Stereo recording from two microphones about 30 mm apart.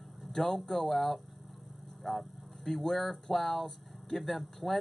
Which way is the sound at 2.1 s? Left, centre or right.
Centre.